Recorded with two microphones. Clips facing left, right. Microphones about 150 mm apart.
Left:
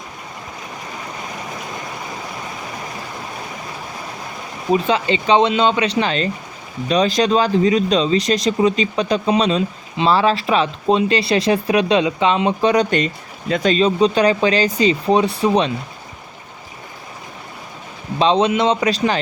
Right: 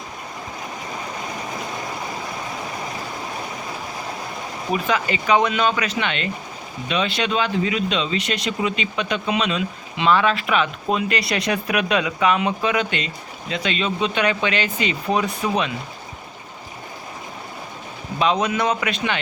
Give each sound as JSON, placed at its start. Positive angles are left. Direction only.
{"t": 4.7, "sound": "speech", "side_deg": 25}
{"t": 18.2, "sound": "speech", "side_deg": 30}